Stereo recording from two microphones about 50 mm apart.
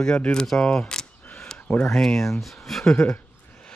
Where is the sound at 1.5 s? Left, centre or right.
Centre.